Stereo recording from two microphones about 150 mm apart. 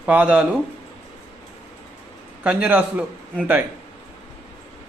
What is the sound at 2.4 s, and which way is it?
Speech, 10° right (ahead or behind).